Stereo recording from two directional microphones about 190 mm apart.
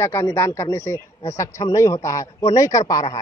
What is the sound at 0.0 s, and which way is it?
A man's voice, 15° left (ahead or behind).